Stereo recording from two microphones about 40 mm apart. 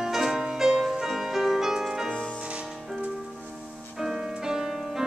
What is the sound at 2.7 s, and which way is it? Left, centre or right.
Music, centre.